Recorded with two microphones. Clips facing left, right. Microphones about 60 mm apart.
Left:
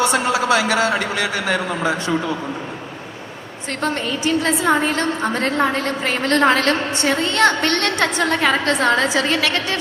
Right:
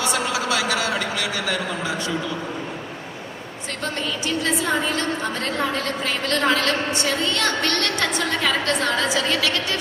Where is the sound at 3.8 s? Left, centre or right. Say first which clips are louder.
Left 6 dB; left.